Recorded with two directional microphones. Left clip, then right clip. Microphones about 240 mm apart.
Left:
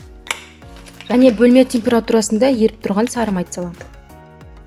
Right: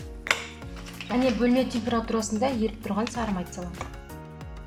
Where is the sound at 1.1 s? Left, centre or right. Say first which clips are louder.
Left 13 dB; left.